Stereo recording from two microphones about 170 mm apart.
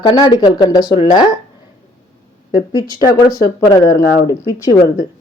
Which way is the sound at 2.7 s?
20° left (ahead or behind).